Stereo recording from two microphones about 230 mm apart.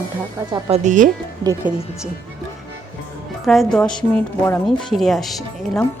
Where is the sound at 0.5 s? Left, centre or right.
Right.